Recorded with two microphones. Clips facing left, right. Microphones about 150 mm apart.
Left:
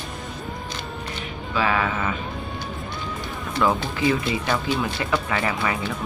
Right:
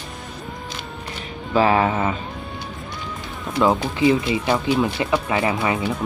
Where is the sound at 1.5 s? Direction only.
35° right (ahead or behind).